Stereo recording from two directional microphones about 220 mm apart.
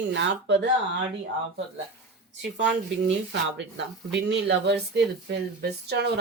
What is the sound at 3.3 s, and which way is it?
Speech, 55° right (ahead or behind).